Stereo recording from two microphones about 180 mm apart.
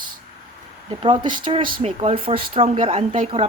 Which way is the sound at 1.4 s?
25° right (ahead or behind).